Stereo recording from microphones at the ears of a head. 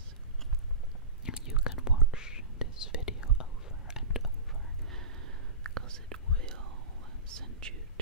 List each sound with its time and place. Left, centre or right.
1.2 s whispering: left
4.9 s whispering: right
7.2 s whispering: right